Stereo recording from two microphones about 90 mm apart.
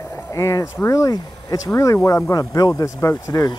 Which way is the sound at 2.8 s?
35° left (ahead or behind).